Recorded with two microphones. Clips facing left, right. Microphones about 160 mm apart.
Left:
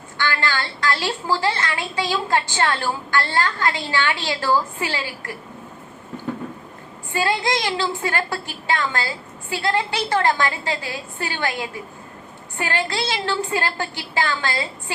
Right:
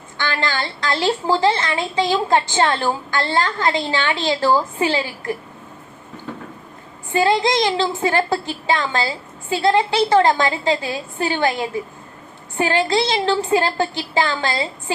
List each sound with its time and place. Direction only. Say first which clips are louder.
0.2 s a woman's voice: right 1 dB; 20° right (ahead or behind)
7.1 s a woman's voice: right 5 dB; 20° right (ahead or behind)